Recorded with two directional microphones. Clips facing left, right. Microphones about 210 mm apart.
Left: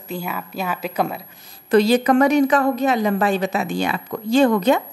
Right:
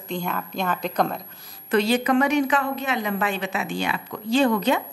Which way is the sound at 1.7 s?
40° left (ahead or behind).